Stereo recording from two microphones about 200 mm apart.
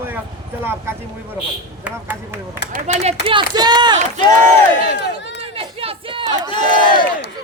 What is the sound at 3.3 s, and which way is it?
Speech, 20° right (ahead or behind).